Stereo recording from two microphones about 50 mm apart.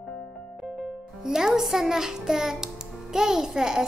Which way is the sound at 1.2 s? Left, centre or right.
Centre.